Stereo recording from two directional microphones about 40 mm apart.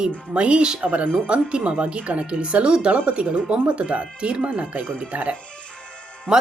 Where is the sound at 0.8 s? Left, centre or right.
Right.